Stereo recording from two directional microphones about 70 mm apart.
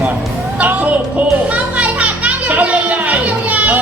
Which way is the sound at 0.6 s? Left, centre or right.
Right.